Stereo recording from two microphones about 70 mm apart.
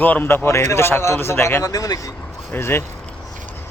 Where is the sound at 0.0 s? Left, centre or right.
Left.